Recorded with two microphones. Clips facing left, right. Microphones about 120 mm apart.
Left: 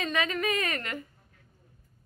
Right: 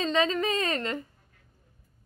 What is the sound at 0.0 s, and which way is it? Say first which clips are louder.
A woman's voice: right 4 dB; 30° right (ahead or behind).